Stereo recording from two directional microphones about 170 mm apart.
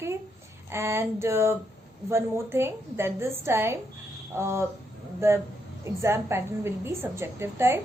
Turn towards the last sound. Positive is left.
turn(degrees=-15)  # may be behind; listen again after turning